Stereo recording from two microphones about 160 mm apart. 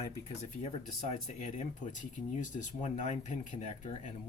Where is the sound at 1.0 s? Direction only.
45° left (ahead or behind).